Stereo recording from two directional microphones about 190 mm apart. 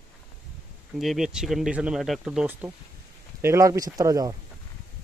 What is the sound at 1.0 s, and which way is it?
Speech, centre (ahead or behind).